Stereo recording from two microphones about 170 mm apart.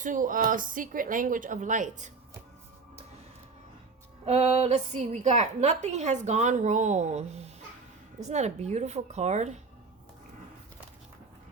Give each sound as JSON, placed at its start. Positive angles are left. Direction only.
{"t": 0.0, "sound": "a woman's voice", "side_deg": -50}
{"t": 4.3, "sound": "a woman's voice", "side_deg": -40}